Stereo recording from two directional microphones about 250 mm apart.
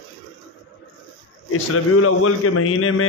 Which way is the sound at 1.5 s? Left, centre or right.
Left.